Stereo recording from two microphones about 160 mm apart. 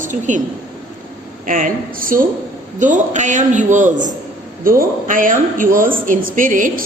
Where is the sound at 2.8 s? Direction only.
50° right (ahead or behind).